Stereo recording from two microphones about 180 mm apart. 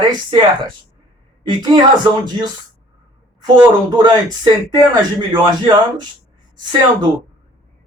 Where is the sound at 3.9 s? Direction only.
25° right (ahead or behind).